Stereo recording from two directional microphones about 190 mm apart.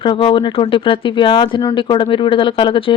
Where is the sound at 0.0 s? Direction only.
25° left (ahead or behind).